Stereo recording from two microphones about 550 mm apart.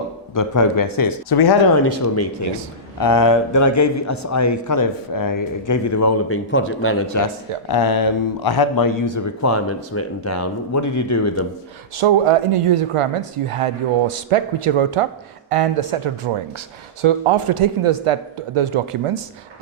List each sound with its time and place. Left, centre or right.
0.3 s a man's voice: left
1.8 s speech: left
3.0 s a man's voice: left
7.7 s a man's voice: left
11.9 s speech: right
15.4 s speech: right